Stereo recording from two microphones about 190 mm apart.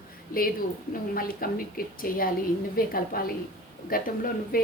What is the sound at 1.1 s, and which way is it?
A woman's voice, 50° left (ahead or behind).